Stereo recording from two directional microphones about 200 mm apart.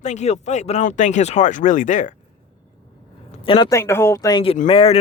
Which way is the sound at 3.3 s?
25° left (ahead or behind).